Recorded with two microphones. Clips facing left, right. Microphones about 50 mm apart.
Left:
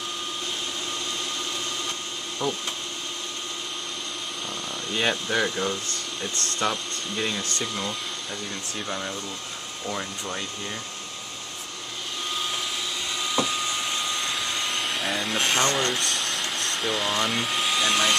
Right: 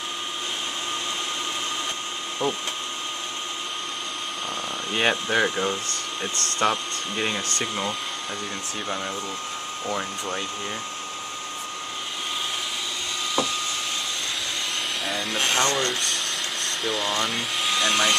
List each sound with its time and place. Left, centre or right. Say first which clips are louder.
2.4 s speech: right 2 dB; right
4.9 s speech: right 2 dB; right
8.8 s speech: right 3 dB; centre
13.4 s a sound: even; centre
15.0 s speech: even; centre